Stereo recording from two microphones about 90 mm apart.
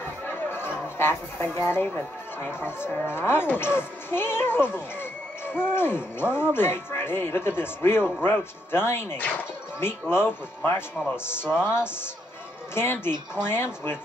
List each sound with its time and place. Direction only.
0.0 s chatter: 20° left (ahead or behind)
3.1 s speech: 25° left (ahead or behind)